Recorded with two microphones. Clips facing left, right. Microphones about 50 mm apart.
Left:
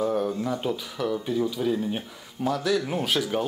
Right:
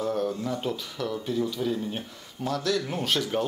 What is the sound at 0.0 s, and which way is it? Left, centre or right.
Speech, centre.